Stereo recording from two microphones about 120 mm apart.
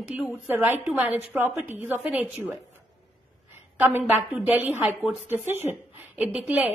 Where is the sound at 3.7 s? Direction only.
20° right (ahead or behind).